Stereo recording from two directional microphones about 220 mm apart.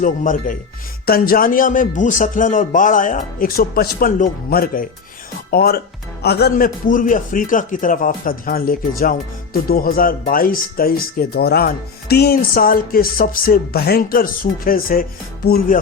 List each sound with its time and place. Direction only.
0.0 s a man's voice: 35° left (ahead or behind)